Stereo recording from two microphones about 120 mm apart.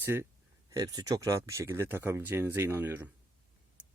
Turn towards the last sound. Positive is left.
turn(degrees=-20)  # may be behind; listen again after turning